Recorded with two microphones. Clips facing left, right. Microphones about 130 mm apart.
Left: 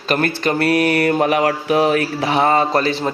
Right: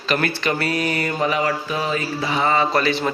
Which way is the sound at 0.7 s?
60° left (ahead or behind).